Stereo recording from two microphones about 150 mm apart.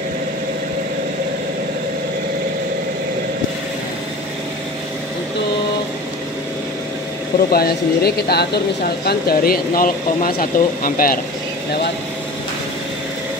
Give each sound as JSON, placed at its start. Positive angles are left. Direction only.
{"t": 7.5, "sound": "speech", "side_deg": 90}